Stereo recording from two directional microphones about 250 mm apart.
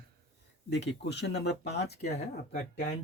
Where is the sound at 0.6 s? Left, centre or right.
Left.